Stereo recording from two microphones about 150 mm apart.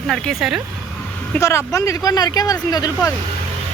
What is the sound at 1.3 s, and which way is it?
Speech, 20° left (ahead or behind).